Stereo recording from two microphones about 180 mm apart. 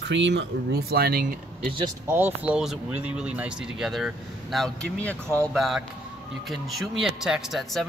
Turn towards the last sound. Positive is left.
turn(degrees=0)  # may be behind; listen again after turning